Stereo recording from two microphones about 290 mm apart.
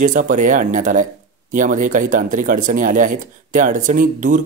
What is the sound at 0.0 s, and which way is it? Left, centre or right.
Speech, right.